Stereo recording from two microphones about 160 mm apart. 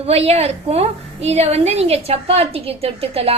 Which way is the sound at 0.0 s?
40° right (ahead or behind).